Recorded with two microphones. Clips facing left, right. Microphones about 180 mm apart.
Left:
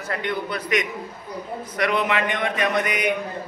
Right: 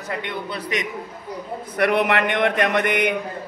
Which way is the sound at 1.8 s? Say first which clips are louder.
Right 3 dB; 60° right (ahead or behind).